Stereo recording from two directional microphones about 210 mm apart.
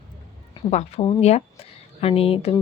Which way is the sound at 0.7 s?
30° left (ahead or behind).